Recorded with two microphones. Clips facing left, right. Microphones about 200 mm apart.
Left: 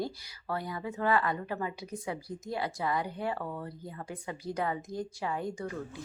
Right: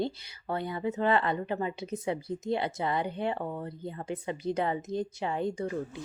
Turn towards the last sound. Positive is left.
turn(degrees=-25)  # may be behind; listen again after turning